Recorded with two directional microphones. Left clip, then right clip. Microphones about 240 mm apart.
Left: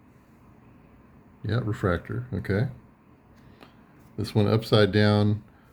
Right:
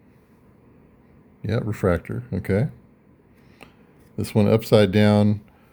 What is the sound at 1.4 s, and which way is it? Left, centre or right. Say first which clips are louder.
Speech: right 5 dB; right.